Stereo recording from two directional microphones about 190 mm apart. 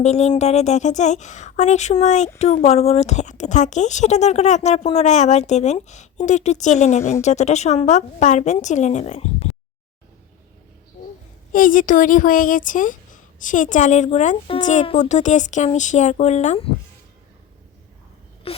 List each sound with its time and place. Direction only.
0.0 s a woman's voice: 35° left (ahead or behind)
11.5 s a woman's voice: 45° left (ahead or behind)
18.5 s wail: 30° left (ahead or behind)